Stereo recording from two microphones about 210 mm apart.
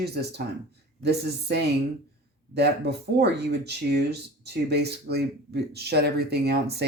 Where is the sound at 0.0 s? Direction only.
50° right (ahead or behind).